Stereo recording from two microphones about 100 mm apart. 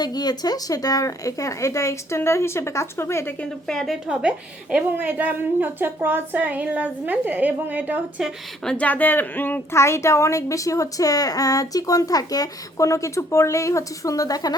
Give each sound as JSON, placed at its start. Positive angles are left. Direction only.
{"t": 0.0, "sound": "speech", "side_deg": 45}
{"t": 3.7, "sound": "a woman's voice", "side_deg": 5}
{"t": 4.0, "sound": "a woman's voice", "side_deg": -10}
{"t": 8.6, "sound": "speech", "side_deg": 10}